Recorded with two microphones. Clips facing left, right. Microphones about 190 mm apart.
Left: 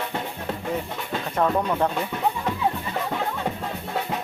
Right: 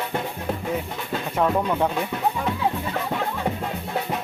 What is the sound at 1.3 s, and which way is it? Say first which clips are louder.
Music: right 1 dB; 5° right (ahead or behind).